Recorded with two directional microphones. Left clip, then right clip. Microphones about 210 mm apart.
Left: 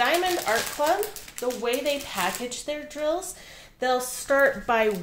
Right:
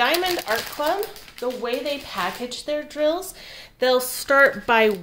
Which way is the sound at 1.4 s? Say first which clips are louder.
Right 1 dB; 10° right (ahead or behind).